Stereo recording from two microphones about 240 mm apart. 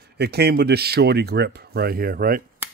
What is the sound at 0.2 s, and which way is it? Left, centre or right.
Speech, right.